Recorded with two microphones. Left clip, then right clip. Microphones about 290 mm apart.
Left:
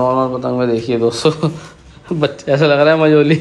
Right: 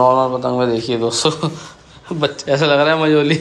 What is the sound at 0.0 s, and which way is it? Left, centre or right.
Speech, centre.